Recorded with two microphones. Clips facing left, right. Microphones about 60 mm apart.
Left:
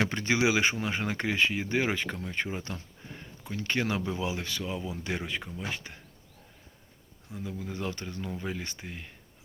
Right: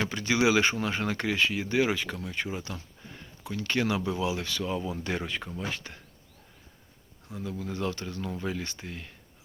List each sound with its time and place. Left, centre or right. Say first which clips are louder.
0.0 s speech: left 1 dB; left
0.3 s speech: right 3 dB; centre; by 2.8 s left
3.2 s speech: right 2 dB; left
4.6 s speech: right 3 dB; centre
7.6 s speech: right 4 dB; left